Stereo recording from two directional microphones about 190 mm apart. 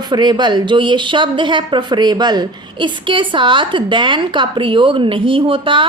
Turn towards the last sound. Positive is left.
turn(degrees=-25)  # may be behind; listen again after turning